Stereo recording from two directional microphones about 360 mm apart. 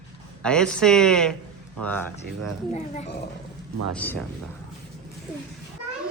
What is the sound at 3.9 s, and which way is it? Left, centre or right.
Speech, centre.